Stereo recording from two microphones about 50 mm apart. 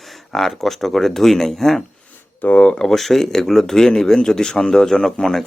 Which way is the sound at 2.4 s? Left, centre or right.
Left.